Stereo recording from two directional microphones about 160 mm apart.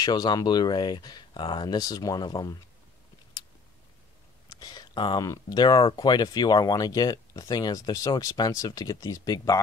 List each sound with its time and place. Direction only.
0.0 s speech: 25° left (ahead or behind)
4.5 s speech: 25° left (ahead or behind)